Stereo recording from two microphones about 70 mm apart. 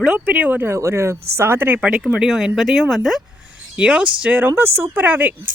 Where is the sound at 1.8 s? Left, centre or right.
Centre.